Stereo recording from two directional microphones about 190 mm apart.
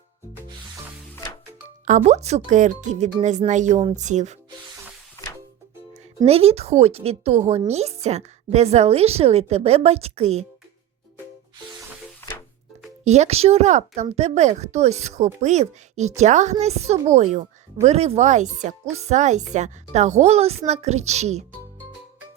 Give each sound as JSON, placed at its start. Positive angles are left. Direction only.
{"t": 1.8, "sound": "speech", "side_deg": -40}
{"t": 6.2, "sound": "speech", "side_deg": -30}
{"t": 13.1, "sound": "speech", "side_deg": -35}